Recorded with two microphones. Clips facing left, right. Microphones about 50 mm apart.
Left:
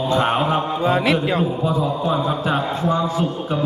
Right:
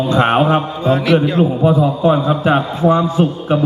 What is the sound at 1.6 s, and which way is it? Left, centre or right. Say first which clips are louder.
A man's voice: right 7 dB; right.